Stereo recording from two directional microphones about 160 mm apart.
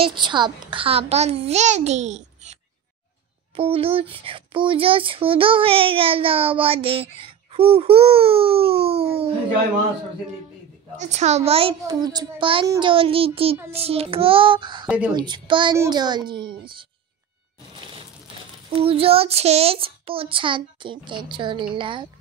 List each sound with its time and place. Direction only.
0.0 s speech: 30° right (ahead or behind)
11.0 s a woman's voice: 45° right (ahead or behind)
11.9 s a woman's voice: 25° right (ahead or behind)
18.8 s speech: 35° right (ahead or behind)